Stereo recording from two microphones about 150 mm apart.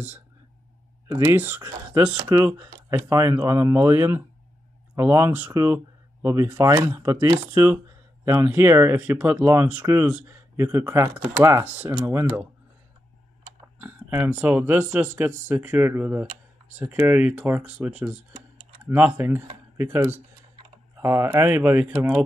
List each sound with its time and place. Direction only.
1.0 s speech: 20° right (ahead or behind)
13.7 s speech: 10° right (ahead or behind)